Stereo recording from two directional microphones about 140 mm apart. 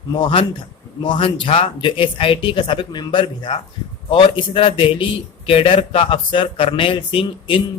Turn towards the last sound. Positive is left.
turn(degrees=40)  # may be behind; listen again after turning